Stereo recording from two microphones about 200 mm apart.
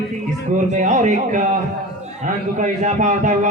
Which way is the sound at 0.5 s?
35° right (ahead or behind).